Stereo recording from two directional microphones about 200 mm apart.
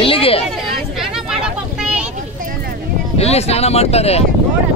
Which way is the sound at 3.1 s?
30° left (ahead or behind).